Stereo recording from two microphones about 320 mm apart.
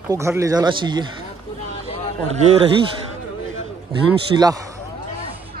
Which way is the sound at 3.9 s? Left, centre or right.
Centre.